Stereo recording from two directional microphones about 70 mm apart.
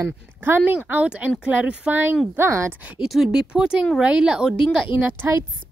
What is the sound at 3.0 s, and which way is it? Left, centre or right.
Speech, centre.